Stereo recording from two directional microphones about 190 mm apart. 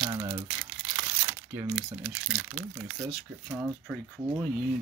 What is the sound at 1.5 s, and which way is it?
Speech, 5° right (ahead or behind).